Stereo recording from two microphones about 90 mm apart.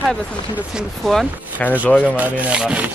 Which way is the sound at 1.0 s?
Centre (ahead or behind).